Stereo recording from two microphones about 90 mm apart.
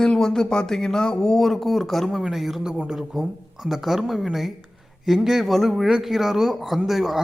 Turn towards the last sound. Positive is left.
turn(degrees=0)  # may be behind; listen again after turning